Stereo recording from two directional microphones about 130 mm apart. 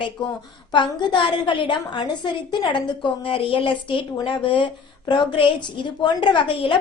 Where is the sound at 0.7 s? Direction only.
35° left (ahead or behind).